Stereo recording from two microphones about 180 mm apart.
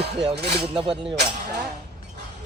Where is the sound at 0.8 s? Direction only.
30° right (ahead or behind).